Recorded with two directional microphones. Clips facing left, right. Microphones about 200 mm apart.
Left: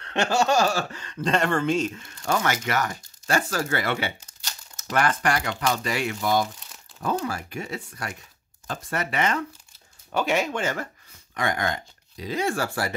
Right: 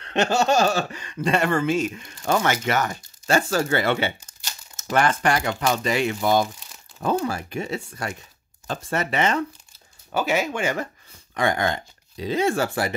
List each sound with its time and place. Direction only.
0.0 s speech: 20° right (ahead or behind)
10.1 s speech: 5° right (ahead or behind)
11.3 s speech: 30° right (ahead or behind)